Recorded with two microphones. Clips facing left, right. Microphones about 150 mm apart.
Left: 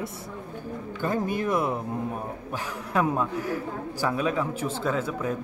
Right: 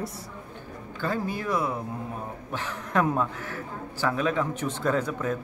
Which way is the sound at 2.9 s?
10° left (ahead or behind).